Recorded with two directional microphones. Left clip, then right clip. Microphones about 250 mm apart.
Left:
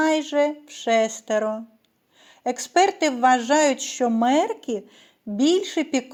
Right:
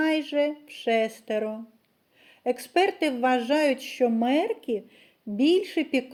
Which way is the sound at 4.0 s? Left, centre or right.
Left.